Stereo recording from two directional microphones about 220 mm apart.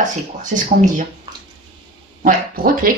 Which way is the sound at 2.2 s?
40° right (ahead or behind).